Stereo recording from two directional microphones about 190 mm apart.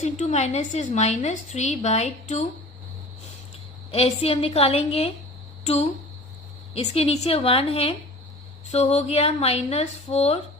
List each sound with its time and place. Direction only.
0.0 s a woman's voice: 40° left (ahead or behind)
3.9 s a woman's voice: 30° left (ahead or behind)